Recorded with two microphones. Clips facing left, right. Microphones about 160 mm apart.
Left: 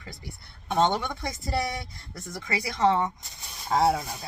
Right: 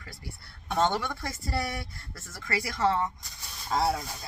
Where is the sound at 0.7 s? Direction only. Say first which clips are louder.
Left 3 dB; 20° left (ahead or behind).